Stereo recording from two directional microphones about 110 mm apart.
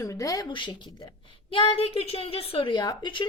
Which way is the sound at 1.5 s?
55° left (ahead or behind).